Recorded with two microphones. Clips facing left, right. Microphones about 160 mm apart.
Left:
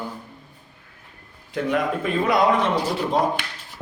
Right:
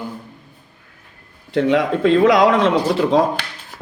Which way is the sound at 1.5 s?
70° right (ahead or behind).